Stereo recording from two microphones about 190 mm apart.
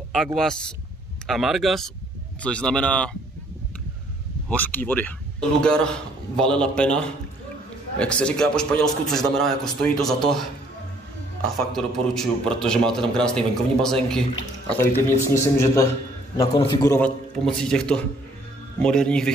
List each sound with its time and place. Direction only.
0.1 s a man's voice: centre (ahead or behind)
4.5 s a man's voice: 10° left (ahead or behind)
11.4 s a man's voice: centre (ahead or behind)
14.9 s speech: 45° left (ahead or behind)
15.3 s a man's voice: 15° left (ahead or behind)
17.6 s a man's voice: 5° left (ahead or behind)